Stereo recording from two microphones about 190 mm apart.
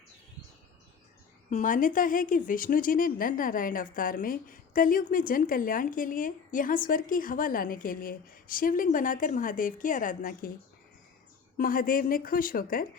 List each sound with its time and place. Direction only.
1.5 s a woman's voice: 40° left (ahead or behind)
11.5 s a woman's voice: 50° left (ahead or behind)